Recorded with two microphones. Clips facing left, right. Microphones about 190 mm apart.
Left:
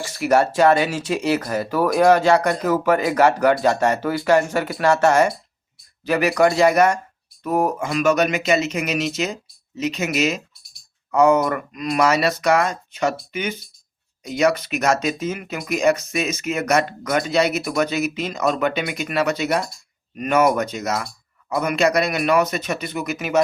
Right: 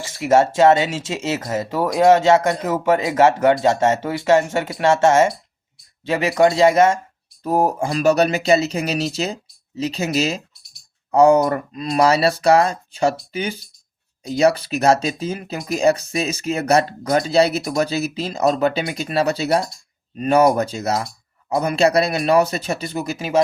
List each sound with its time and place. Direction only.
0.0 s speech: 20° right (ahead or behind)